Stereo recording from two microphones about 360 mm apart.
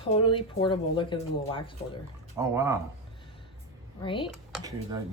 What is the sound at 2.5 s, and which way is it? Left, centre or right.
Speech, centre.